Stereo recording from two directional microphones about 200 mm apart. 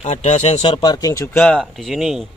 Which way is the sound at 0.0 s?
35° left (ahead or behind).